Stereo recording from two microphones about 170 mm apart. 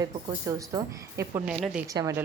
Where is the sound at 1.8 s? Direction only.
20° right (ahead or behind).